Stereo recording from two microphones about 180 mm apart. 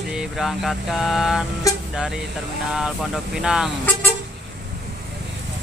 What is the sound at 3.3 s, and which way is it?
Speech, 5° right (ahead or behind).